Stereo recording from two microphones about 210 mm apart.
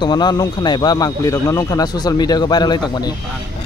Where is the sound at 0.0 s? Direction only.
20° left (ahead or behind).